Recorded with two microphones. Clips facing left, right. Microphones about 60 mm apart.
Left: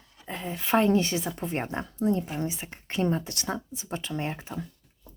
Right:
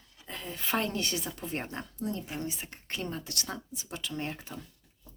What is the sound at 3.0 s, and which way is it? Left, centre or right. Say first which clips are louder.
Speech: left 11 dB; left.